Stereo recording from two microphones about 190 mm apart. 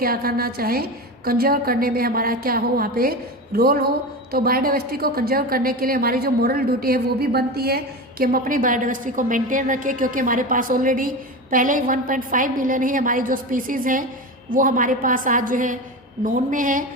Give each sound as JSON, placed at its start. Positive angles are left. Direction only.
{"t": 0.0, "sound": "a woman's voice", "side_deg": -50}